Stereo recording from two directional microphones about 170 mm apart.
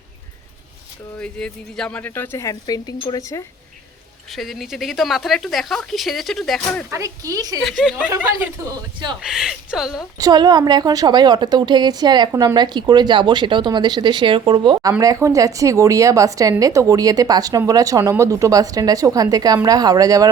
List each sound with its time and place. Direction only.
1.2 s speech: 5° left (ahead or behind)
4.3 s speech: centre (ahead or behind)
6.9 s a woman's voice: 20° right (ahead or behind)
7.6 s speech: centre (ahead or behind)
9.2 s speech: centre (ahead or behind)
10.2 s a woman's voice: 20° right (ahead or behind)